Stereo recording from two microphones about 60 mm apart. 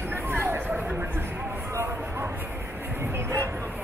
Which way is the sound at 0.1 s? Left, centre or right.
Right.